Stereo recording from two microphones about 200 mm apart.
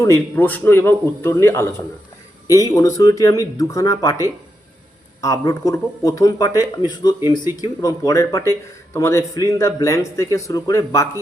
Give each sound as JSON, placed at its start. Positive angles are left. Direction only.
{"t": 0.0, "sound": "speech", "side_deg": 10}
{"t": 2.7, "sound": "speech", "side_deg": 15}